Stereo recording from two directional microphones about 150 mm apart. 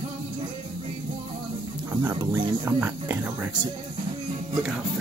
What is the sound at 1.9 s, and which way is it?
Speech, 15° right (ahead or behind).